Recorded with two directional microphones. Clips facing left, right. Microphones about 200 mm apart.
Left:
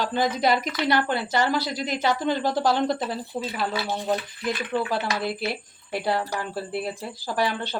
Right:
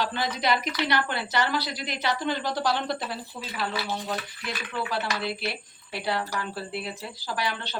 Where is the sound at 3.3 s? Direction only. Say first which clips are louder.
Left 4 dB; 35° left (ahead or behind).